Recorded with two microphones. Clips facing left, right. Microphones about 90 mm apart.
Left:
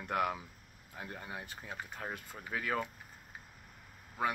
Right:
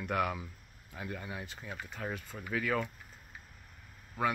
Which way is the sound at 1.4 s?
50° left (ahead or behind).